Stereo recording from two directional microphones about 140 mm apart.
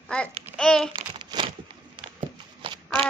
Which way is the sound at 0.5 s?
5° left (ahead or behind).